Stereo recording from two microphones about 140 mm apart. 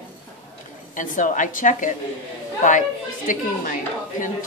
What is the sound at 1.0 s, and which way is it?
Speech, 65° left (ahead or behind).